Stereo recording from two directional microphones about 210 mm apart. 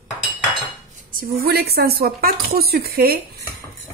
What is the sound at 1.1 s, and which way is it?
A woman's voice, 45° right (ahead or behind).